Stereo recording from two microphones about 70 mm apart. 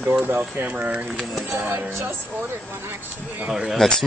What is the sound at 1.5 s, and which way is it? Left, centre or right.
Speech, right.